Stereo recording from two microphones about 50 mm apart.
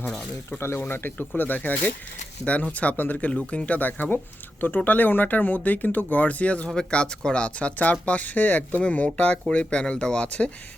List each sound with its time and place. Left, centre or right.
0.8 s speech: left
1.4 s speech: left
2.4 s speech: left
2.9 s speech: left
3.2 s speech: left